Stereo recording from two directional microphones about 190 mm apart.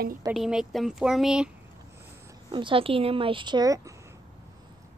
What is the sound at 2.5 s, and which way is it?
Speech, 25° right (ahead or behind).